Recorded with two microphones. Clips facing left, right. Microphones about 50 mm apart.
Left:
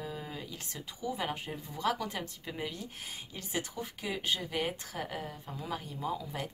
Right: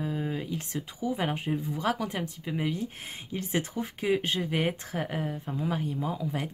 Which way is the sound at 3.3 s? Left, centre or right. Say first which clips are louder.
Right 7 dB; right.